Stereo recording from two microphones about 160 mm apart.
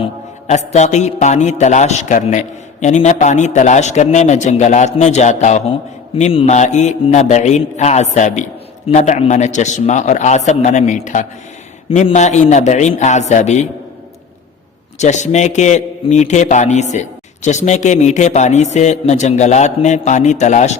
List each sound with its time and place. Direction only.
0.0 s a man's voice: 45° left (ahead or behind)
14.9 s a man's voice: 45° left (ahead or behind)